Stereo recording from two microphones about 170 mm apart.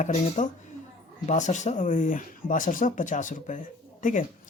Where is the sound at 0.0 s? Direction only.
45° left (ahead or behind).